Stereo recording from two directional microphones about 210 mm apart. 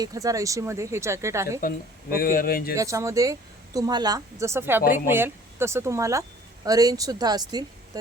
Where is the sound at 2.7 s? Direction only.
15° right (ahead or behind).